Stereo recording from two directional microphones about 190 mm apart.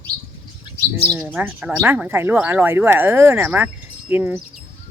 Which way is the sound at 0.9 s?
15° right (ahead or behind).